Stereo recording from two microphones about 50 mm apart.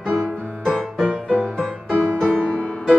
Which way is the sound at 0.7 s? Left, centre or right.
Centre.